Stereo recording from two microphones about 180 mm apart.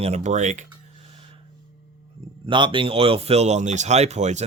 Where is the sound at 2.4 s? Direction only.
25° right (ahead or behind).